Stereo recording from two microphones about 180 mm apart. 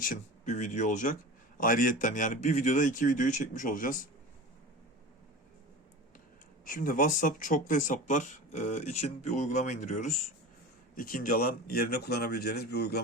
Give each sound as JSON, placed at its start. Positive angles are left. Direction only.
{"t": 0.0, "sound": "speech", "side_deg": 50}
{"t": 6.7, "sound": "speech", "side_deg": 50}